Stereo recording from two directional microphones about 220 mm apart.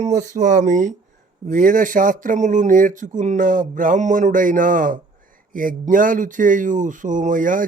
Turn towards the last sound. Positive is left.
turn(degrees=-35)  # may be behind; listen again after turning